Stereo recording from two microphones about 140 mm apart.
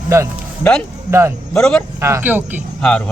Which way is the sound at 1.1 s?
20° right (ahead or behind).